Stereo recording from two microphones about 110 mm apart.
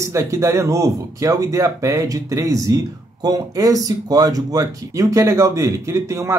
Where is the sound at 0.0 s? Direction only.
25° right (ahead or behind).